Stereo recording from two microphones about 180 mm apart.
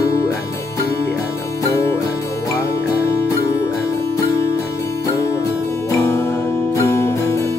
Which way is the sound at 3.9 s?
15° left (ahead or behind).